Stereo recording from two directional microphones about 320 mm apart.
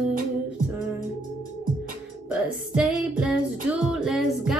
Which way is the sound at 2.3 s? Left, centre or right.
Centre.